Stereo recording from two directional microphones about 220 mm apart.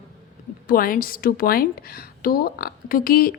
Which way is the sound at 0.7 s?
40° left (ahead or behind).